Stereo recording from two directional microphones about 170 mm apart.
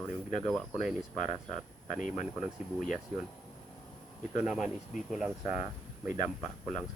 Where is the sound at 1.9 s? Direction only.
45° left (ahead or behind).